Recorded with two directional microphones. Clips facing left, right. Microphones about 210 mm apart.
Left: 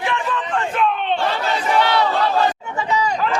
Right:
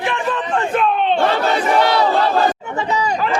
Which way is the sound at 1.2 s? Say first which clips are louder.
Right 5 dB; 60° right (ahead or behind).